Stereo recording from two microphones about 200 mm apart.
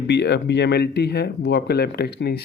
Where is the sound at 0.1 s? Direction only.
60° left (ahead or behind).